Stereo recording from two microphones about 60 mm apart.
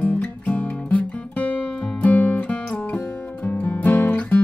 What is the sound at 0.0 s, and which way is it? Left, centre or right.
Music, left.